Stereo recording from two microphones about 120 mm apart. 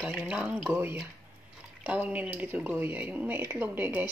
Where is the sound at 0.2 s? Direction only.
10° right (ahead or behind).